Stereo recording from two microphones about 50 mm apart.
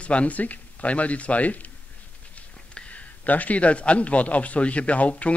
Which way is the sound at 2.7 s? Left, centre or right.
Left.